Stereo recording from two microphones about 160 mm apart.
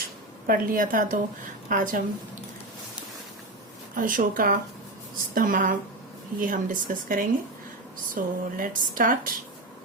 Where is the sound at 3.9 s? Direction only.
60° right (ahead or behind).